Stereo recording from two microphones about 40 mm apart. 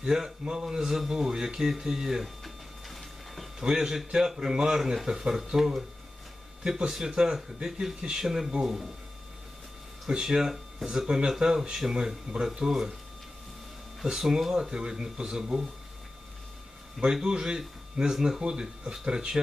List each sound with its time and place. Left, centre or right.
0.0 s speech: centre
2.9 s a sound: centre
3.6 s speech: centre
10.1 s speech: centre
14.0 s speech: centre
14.6 s speech: centre
17.0 s speech: centre